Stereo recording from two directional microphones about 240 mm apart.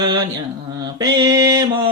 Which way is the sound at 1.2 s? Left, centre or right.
Centre.